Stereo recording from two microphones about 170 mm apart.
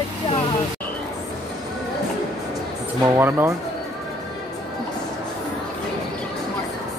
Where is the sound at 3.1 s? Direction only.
15° right (ahead or behind).